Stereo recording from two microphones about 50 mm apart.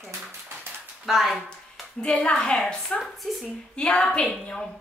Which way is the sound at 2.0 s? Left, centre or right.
Centre.